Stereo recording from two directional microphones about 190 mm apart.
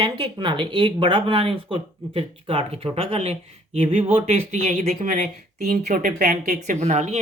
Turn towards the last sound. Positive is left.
turn(degrees=-35)  # may be behind; listen again after turning